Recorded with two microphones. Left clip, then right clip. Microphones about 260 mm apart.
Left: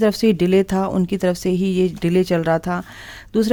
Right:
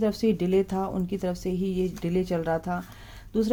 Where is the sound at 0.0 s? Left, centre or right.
Left.